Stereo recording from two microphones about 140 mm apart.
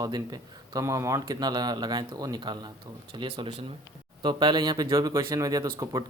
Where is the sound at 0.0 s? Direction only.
25° right (ahead or behind).